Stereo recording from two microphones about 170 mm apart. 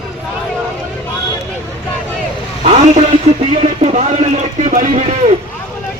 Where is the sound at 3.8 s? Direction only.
40° right (ahead or behind).